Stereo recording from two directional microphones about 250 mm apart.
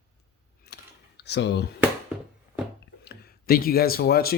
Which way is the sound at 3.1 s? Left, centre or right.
Left.